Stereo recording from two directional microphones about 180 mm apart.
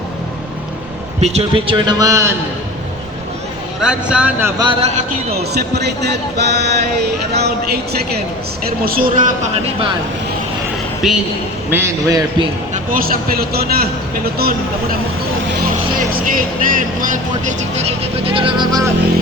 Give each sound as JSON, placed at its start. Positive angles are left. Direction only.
{"t": 1.2, "sound": "a man's voice", "side_deg": -35}
{"t": 3.8, "sound": "speech", "side_deg": -5}
{"t": 4.6, "sound": "a man's voice", "side_deg": -30}
{"t": 5.4, "sound": "speech", "side_deg": -65}
{"t": 8.8, "sound": "speech", "side_deg": -55}
{"t": 11.0, "sound": "a woman's voice", "side_deg": 0}
{"t": 11.7, "sound": "speech", "side_deg": -15}
{"t": 12.7, "sound": "speech", "side_deg": -50}
{"t": 16.0, "sound": "speech", "side_deg": -50}
{"t": 18.3, "sound": "a man's voice", "side_deg": -30}